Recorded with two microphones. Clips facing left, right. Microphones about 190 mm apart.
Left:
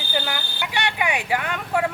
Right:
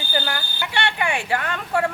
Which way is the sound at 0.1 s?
5° left (ahead or behind).